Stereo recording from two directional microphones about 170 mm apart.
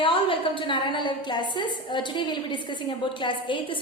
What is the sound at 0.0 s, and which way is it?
A woman's voice, 30° left (ahead or behind).